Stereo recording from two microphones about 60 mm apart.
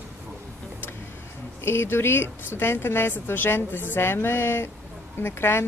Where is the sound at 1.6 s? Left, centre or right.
Left.